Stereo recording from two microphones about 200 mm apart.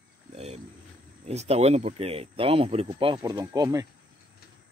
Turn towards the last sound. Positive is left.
turn(degrees=-20)  # may be behind; listen again after turning